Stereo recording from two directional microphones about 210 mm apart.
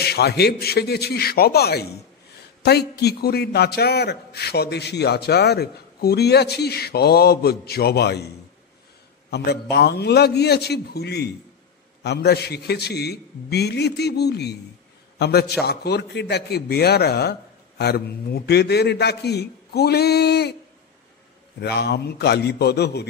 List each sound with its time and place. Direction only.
0.0 s a man's voice: 50° left (ahead or behind)
9.3 s a man's voice: 50° left (ahead or behind)
21.5 s a man's voice: 50° left (ahead or behind)